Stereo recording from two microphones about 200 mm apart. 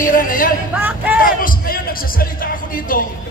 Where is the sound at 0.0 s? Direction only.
45° left (ahead or behind).